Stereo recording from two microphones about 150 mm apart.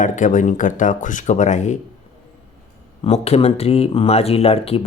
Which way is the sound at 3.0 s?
45° left (ahead or behind).